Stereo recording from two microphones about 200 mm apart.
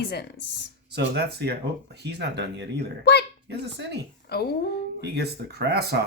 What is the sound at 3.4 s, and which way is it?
Speech, 60° right (ahead or behind).